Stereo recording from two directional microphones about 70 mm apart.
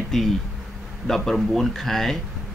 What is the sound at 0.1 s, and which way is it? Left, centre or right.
A man's voice, centre.